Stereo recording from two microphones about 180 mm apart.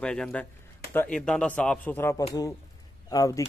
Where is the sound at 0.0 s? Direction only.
5° left (ahead or behind).